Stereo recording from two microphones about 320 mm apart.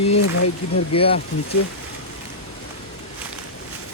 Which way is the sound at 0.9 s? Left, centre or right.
Centre.